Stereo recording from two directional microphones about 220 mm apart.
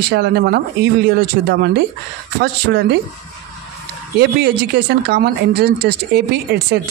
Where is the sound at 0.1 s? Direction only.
50° right (ahead or behind).